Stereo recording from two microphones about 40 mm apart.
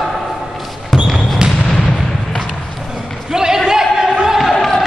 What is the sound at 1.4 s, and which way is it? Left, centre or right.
Artillery fire, right.